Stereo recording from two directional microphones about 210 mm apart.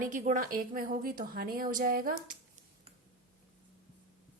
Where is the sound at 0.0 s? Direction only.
35° right (ahead or behind).